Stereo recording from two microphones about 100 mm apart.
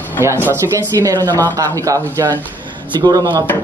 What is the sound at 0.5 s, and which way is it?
Speech, 30° right (ahead or behind).